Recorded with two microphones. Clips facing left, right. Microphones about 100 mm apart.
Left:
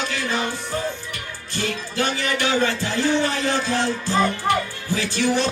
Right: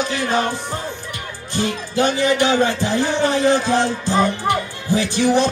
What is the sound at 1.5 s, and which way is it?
Music, 20° right (ahead or behind).